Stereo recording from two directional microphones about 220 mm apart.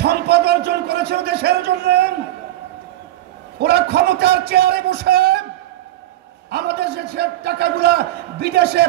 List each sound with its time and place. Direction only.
0.0 s a sound: 50° right (ahead or behind)
3.5 s a man's voice: 45° right (ahead or behind)
6.5 s a man's voice: 50° right (ahead or behind)